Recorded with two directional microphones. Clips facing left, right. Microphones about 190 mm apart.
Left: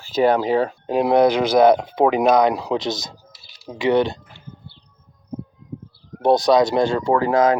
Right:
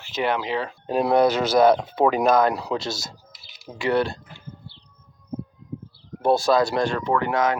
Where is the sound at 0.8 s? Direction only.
15° left (ahead or behind).